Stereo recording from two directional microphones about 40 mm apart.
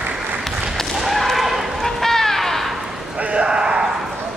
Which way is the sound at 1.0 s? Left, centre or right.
Centre.